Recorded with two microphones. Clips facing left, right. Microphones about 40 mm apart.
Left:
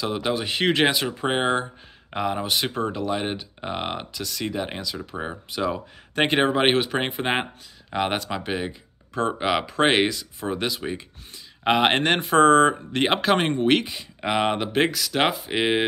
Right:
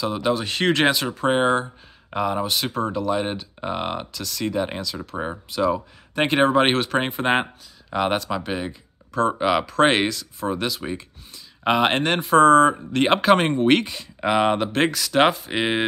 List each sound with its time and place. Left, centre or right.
0.0 s speech: left
2.4 s speech: left
3.1 s speech: centre
4.1 s speech: left
4.6 s speech: centre
5.1 s speech: centre
5.5 s speech: left
6.4 s speech: centre
8.5 s speech: left
9.4 s speech: centre
10.4 s speech: centre
11.3 s speech: left
12.0 s speech: left
13.2 s speech: centre